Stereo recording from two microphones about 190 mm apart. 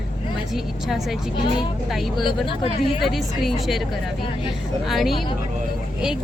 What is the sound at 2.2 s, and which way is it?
Speech, 25° left (ahead or behind).